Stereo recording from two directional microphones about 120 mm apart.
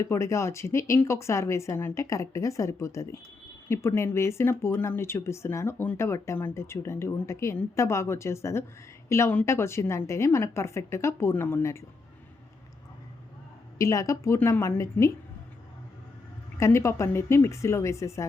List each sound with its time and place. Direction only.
0.0 s speech: 25° left (ahead or behind)
13.7 s speech: 25° left (ahead or behind)
16.6 s speech: 25° left (ahead or behind)